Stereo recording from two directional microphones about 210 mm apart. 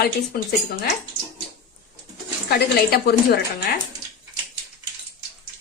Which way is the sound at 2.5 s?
45° left (ahead or behind).